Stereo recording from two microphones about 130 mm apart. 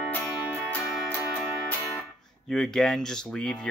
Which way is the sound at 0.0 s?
10° left (ahead or behind).